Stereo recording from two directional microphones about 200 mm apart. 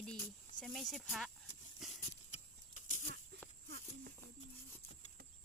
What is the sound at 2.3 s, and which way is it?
Horse, 40° left (ahead or behind).